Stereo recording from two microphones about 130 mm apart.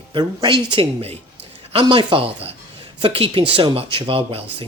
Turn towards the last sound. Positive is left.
turn(degrees=-45)  # may be behind; listen again after turning